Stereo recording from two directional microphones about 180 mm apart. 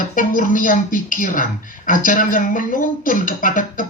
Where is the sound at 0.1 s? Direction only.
50° left (ahead or behind).